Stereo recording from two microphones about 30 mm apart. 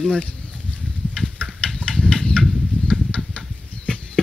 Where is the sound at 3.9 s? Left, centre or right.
Left.